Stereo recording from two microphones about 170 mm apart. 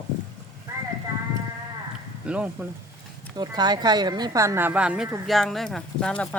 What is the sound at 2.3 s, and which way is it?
Speech, 5° right (ahead or behind).